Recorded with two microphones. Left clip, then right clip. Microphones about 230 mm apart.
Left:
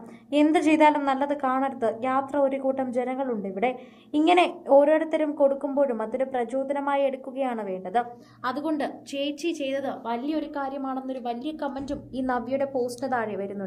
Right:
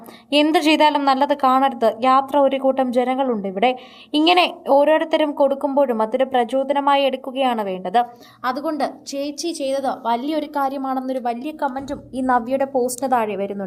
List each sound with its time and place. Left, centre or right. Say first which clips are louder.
0.3 s a woman's voice: right 5 dB; right
8.4 s a woman's voice: right 6 dB; centre; by 11.2 s right
11.6 s a woman's voice: right 9 dB; centre
12.2 s a woman's voice: right 8 dB; right